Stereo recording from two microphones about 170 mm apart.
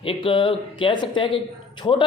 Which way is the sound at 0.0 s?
30° left (ahead or behind).